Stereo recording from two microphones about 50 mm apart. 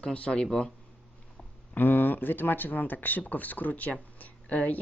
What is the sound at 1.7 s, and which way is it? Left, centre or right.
Speech, left.